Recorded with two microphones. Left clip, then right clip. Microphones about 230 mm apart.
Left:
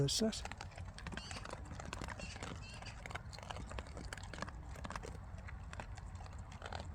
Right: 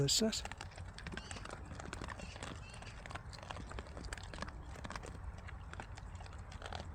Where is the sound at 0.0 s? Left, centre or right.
Centre.